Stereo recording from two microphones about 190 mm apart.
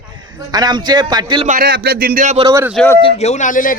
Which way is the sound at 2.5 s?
15° right (ahead or behind).